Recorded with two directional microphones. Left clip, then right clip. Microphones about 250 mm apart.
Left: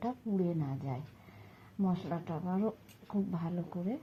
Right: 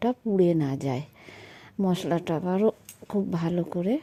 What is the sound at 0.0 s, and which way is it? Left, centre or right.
Speech, right.